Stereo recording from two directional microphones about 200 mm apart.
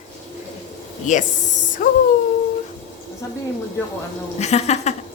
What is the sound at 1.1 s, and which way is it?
Speech, 40° left (ahead or behind).